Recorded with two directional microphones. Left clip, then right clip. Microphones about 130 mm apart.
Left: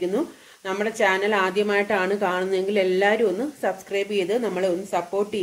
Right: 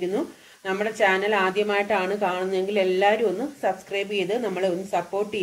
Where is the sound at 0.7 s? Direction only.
70° left (ahead or behind).